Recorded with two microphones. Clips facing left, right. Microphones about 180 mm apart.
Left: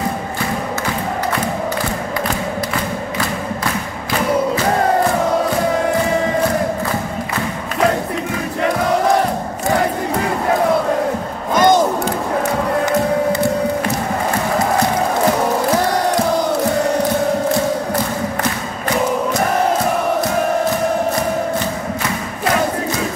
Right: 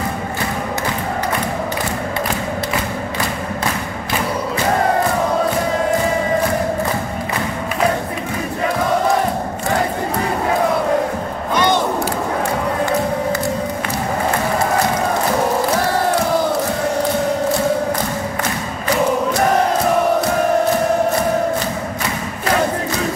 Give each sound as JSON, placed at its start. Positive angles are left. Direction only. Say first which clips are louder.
{"t": 11.5, "sound": "crowd", "louder": "left 4 dB", "side_deg": 45}